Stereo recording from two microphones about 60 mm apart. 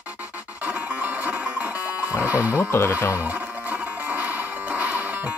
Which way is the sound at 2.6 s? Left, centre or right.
Left.